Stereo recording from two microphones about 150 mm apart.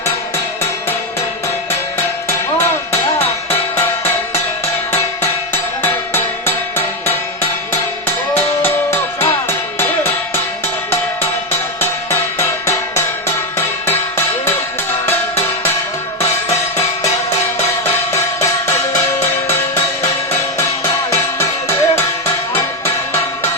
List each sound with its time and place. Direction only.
5.8 s music: 15° left (ahead or behind)
8.6 s music: 15° left (ahead or behind)
19.2 s music: 15° left (ahead or behind)
21.3 s music: 15° left (ahead or behind)